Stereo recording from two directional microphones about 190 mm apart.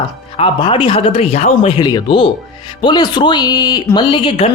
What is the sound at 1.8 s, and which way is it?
Speech, 20° left (ahead or behind).